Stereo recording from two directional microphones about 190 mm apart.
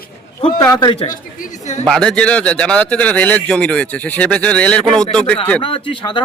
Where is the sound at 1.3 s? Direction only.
40° left (ahead or behind).